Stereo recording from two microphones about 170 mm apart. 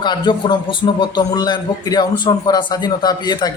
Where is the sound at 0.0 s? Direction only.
25° left (ahead or behind).